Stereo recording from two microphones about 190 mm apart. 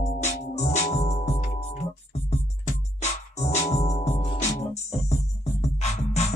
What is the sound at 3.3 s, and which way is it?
Music, 35° left (ahead or behind).